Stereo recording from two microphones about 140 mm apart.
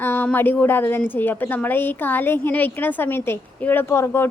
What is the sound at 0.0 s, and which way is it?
A woman's voice, 15° left (ahead or behind).